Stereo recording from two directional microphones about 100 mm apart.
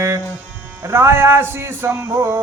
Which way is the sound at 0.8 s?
25° right (ahead or behind).